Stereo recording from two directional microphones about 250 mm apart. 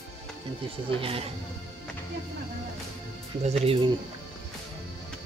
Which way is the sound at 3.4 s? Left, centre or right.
Right.